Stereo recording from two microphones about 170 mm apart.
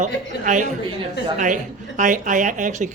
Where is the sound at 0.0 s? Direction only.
50° right (ahead or behind).